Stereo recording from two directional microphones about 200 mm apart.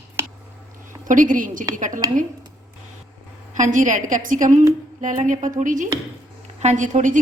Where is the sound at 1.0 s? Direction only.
40° right (ahead or behind).